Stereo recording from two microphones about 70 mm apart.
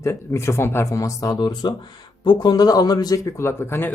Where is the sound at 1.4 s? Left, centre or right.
Left.